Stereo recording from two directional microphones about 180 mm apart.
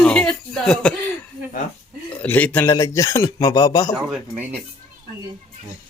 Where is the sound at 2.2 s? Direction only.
10° left (ahead or behind).